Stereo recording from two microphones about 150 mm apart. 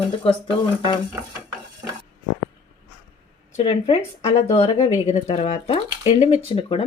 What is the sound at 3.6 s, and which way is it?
A woman's voice, 40° left (ahead or behind).